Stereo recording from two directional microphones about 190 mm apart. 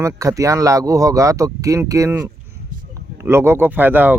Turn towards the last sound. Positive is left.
turn(degrees=-10)  # may be behind; listen again after turning